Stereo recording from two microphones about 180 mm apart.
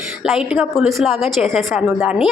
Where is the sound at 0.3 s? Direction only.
5° right (ahead or behind).